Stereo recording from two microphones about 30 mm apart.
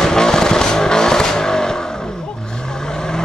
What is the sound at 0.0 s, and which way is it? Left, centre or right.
Vehicle, centre.